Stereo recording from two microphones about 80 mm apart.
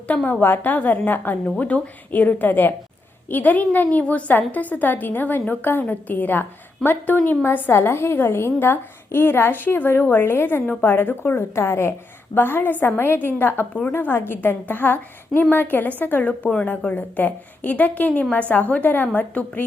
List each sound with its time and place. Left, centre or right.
0.1 s a woman's voice: centre